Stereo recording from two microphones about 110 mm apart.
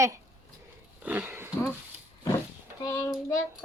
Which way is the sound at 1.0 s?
15° right (ahead or behind).